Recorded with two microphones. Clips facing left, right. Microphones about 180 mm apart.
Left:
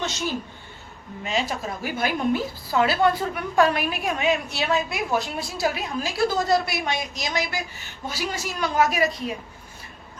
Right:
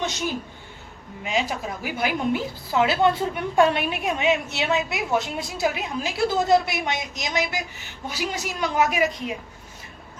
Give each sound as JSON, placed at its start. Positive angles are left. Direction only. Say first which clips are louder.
{"t": 1.2, "sound": "a woman's voice", "louder": "right 1 dB", "side_deg": -15}